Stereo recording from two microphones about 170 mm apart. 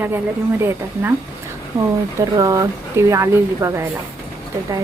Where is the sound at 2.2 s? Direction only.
20° right (ahead or behind).